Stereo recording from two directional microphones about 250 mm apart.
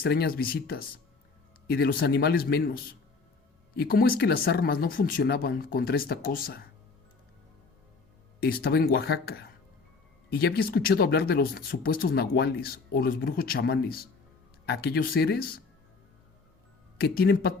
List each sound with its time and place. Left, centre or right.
0.0 s speech: left
8.4 s speech: left
17.0 s speech: left